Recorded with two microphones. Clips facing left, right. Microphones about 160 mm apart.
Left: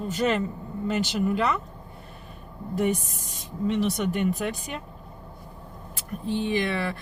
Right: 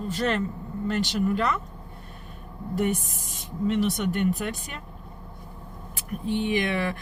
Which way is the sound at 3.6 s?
Centre (ahead or behind).